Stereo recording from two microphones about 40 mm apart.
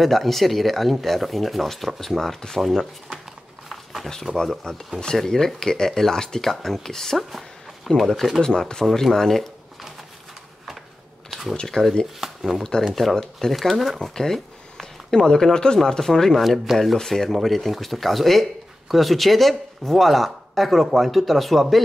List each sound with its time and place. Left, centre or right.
0.0 s speech: centre
3.6 s a sound: centre
4.7 s speech: centre
8.4 s speech: centre
11.6 s speech: centre
12.2 s speech: centre
13.1 s speech: centre
16.3 s speech: centre
16.7 s speech: centre